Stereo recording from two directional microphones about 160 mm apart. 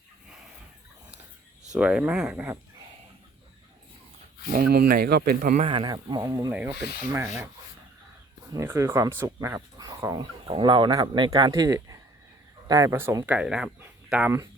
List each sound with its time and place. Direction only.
1.7 s speech: 5° right (ahead or behind)
4.4 s speech: 65° right (ahead or behind)
5.5 s speech: 35° right (ahead or behind); by 7.5 s 15° right (ahead or behind)
8.5 s speech: 20° right (ahead or behind)